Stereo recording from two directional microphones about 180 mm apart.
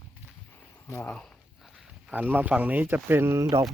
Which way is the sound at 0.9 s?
10° left (ahead or behind).